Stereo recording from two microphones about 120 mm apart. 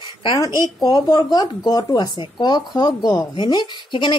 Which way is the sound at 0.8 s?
30° left (ahead or behind).